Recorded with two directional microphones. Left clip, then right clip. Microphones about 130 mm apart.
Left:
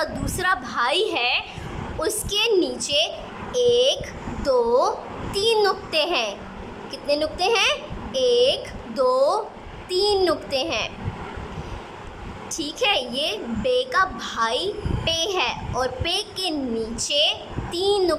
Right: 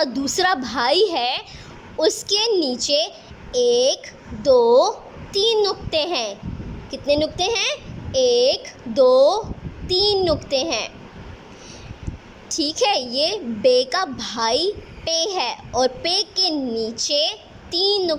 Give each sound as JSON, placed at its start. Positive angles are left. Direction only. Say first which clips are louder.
{"t": 0.0, "sound": "a woman's voice", "louder": "right 5 dB", "side_deg": -40}
{"t": 4.4, "sound": "a woman's voice", "louder": "right 5 dB", "side_deg": -30}
{"t": 12.5, "sound": "a woman's voice", "louder": "right 3 dB", "side_deg": -40}